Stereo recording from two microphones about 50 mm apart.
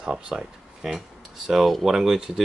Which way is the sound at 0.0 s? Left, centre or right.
Centre.